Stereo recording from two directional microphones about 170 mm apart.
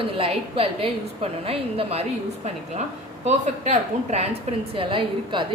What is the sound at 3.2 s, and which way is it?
A woman's voice, 40° right (ahead or behind).